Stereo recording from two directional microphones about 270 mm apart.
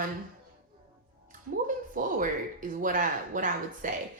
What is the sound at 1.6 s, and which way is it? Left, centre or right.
Speech, right.